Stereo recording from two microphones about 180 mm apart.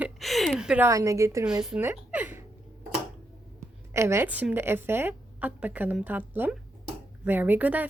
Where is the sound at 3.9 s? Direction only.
15° right (ahead or behind).